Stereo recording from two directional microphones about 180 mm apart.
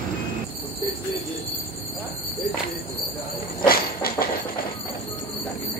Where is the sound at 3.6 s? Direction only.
55° left (ahead or behind).